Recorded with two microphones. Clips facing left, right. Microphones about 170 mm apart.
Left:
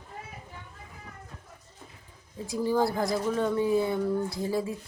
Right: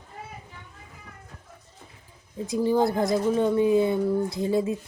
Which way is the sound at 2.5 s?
20° right (ahead or behind).